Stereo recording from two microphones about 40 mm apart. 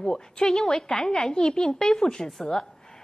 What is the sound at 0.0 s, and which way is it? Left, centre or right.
A woman's voice, centre.